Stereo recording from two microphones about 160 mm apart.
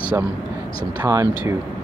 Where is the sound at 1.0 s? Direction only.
20° right (ahead or behind).